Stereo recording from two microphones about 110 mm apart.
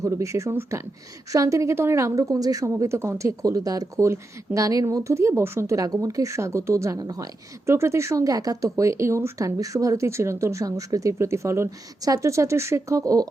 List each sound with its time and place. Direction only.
0.0 s a woman's voice: 30° right (ahead or behind)